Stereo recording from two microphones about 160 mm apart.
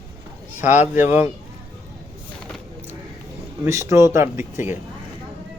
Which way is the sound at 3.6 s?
20° right (ahead or behind).